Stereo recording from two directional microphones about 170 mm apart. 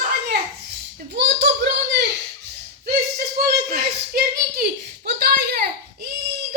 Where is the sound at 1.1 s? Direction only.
90° right.